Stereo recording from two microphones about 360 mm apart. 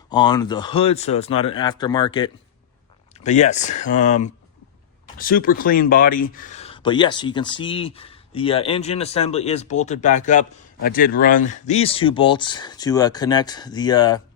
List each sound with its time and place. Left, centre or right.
0.1 s speech: centre